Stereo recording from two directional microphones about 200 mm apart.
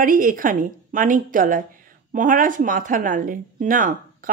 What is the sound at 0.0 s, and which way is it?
A woman's voice, 45° right (ahead or behind).